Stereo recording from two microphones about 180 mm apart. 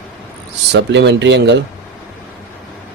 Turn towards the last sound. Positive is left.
turn(degrees=-75)  # may be behind; listen again after turning